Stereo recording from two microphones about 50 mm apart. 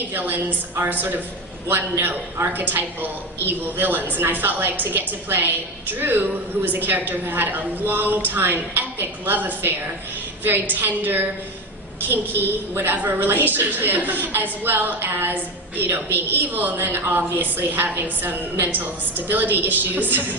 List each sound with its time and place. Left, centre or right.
0.1 s a woman's voice: right
1.6 s a woman's voice: right